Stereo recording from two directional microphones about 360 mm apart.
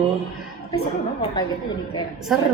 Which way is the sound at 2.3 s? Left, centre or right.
Centre.